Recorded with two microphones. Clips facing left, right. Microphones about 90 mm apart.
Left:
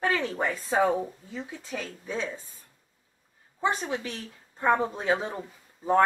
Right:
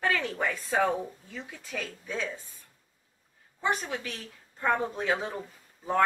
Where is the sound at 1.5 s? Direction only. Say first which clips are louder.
Even; 20° left (ahead or behind).